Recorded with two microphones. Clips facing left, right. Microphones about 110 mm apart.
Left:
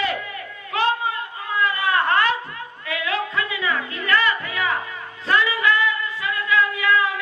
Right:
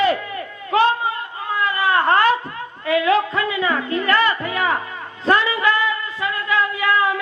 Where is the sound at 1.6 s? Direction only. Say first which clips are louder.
Right 3 dB; 35° right (ahead or behind).